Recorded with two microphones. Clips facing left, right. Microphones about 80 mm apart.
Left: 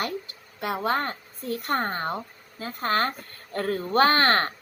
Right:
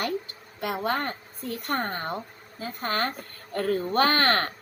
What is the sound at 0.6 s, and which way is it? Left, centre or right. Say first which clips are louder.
Speech: left 2 dB; left.